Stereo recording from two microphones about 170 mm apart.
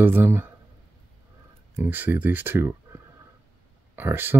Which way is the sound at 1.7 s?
10° right (ahead or behind).